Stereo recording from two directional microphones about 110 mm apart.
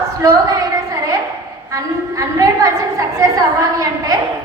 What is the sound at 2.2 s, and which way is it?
A woman's voice, 30° right (ahead or behind).